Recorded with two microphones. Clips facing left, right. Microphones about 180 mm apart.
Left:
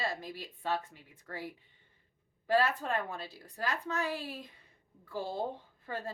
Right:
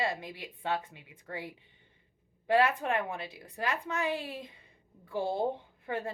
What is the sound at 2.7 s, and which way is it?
A woman's voice, 15° right (ahead or behind).